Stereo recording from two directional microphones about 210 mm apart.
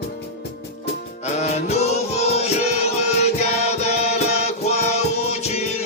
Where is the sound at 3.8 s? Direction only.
30° left (ahead or behind).